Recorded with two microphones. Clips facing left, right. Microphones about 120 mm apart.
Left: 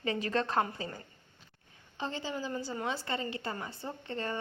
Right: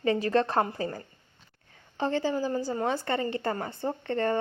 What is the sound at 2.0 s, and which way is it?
A woman's voice, 50° right (ahead or behind).